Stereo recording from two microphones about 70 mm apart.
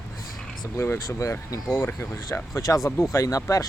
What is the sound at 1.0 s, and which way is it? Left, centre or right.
Speech, left.